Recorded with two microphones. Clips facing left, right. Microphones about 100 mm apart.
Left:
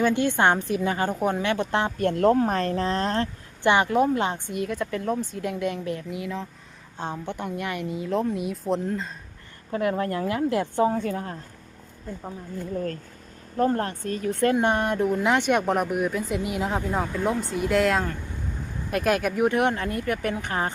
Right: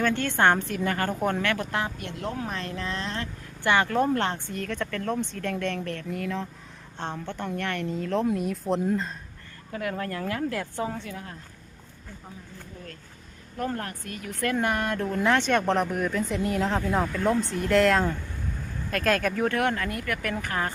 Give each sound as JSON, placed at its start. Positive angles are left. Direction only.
{"t": 0.0, "sound": "speech", "side_deg": 15}
{"t": 2.0, "sound": "speech", "side_deg": 45}
{"t": 3.6, "sound": "a woman's voice", "side_deg": 20}
{"t": 9.7, "sound": "speech", "side_deg": 25}
{"t": 10.9, "sound": "speech", "side_deg": 40}
{"t": 13.6, "sound": "speech", "side_deg": 30}
{"t": 18.9, "sound": "speech", "side_deg": 15}